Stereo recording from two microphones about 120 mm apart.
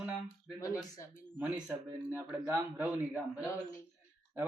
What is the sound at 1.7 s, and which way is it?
Speech, 15° right (ahead or behind).